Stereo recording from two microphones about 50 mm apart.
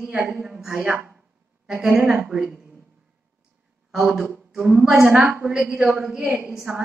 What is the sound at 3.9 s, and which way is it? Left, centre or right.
A man's voice, centre.